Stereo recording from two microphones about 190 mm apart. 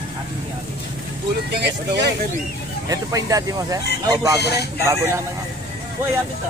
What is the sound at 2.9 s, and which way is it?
Speech, 20° right (ahead or behind).